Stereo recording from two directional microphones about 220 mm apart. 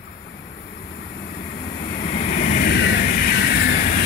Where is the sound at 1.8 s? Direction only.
40° left (ahead or behind).